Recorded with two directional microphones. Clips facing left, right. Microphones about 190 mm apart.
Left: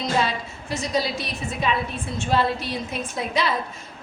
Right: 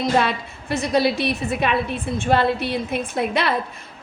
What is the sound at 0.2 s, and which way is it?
A woman's voice, 60° right (ahead or behind).